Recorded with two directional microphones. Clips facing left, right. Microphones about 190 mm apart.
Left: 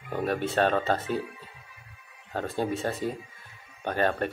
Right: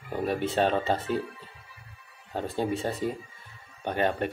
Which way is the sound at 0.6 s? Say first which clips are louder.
Left 1 dB; 15° right (ahead or behind).